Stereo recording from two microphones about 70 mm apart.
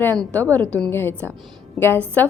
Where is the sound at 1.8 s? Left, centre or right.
Centre.